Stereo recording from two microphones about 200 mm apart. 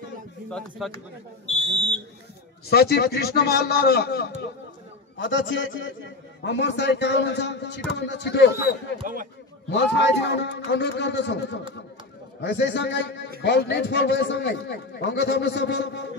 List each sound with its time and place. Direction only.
0.5 s a man's voice: centre (ahead or behind)
2.7 s a man's voice: 55° left (ahead or behind)
5.2 s a man's voice: 70° left (ahead or behind)
9.0 s speech: 45° right (ahead or behind)
9.7 s a man's voice: 60° left (ahead or behind)